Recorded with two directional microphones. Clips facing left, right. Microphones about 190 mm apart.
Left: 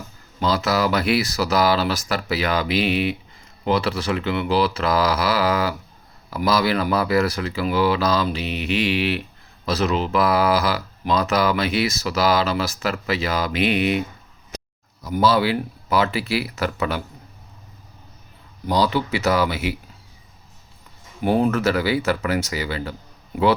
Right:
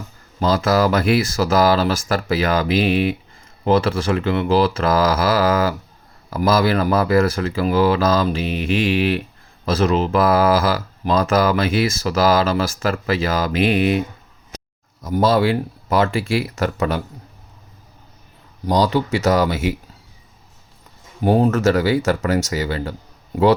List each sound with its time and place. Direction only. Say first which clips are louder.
0.3 s speech: right 4 dB; 45° right (ahead or behind)
15.0 s speech: right 2 dB; 45° right (ahead or behind)
18.7 s speech: right 3 dB; 45° right (ahead or behind)
21.2 s speech: right 3 dB; 40° right (ahead or behind)